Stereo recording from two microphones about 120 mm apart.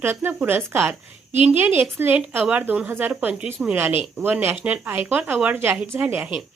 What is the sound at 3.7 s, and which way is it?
Speech, 20° right (ahead or behind).